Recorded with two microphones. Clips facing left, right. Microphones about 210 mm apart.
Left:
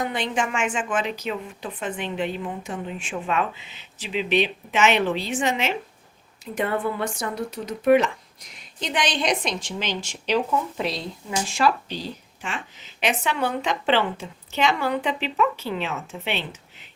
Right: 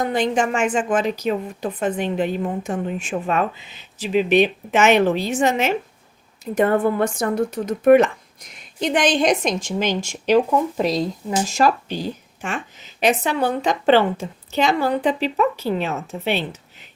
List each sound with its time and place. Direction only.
0.0 s a woman's voice: 40° right (ahead or behind)